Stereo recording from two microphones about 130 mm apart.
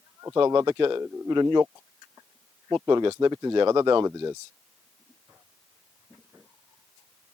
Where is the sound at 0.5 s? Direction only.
35° right (ahead or behind).